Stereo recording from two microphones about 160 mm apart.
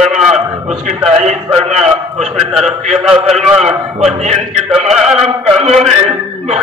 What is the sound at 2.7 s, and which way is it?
A man's voice, 45° right (ahead or behind).